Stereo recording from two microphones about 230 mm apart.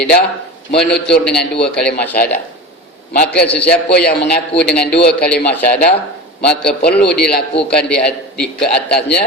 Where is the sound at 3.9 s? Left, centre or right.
Left.